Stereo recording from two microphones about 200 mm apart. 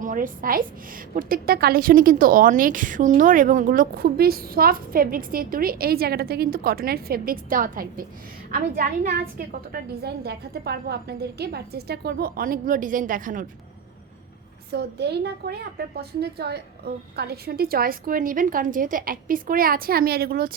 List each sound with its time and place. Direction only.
0.0 s a woman's voice: 40° right (ahead or behind)
14.7 s a woman's voice: 55° right (ahead or behind)